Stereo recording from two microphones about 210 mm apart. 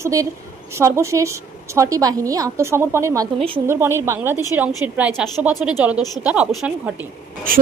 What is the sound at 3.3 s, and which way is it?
Speech, 25° right (ahead or behind).